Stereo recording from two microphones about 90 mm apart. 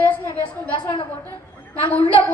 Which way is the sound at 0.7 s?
65° left (ahead or behind).